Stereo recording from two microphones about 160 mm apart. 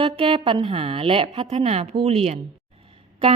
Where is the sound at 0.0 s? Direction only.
35° right (ahead or behind).